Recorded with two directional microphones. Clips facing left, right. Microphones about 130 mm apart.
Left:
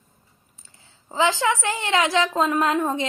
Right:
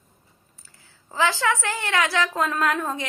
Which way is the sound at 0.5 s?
20° left (ahead or behind).